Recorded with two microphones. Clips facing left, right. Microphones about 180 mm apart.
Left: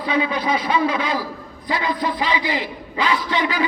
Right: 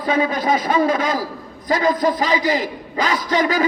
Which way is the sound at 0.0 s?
45° right (ahead or behind).